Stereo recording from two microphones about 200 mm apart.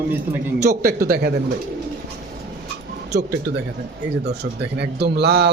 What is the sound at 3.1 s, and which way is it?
A man's voice, 50° right (ahead or behind).